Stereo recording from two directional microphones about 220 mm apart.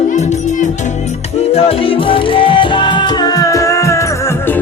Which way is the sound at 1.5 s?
25° left (ahead or behind).